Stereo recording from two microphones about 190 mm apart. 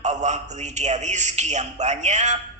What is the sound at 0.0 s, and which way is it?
A man's voice, 40° right (ahead or behind).